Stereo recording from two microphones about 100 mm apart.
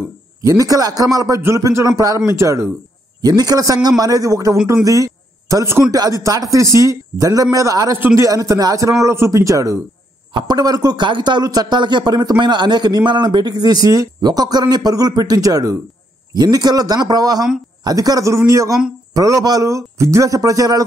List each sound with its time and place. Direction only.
0.4 s a man's voice: 35° right (ahead or behind)
3.2 s a man's voice: 40° right (ahead or behind); by 8.3 s 25° right (ahead or behind)
8.3 s a man's voice: 35° right (ahead or behind)
10.3 s a man's voice: 45° right (ahead or behind)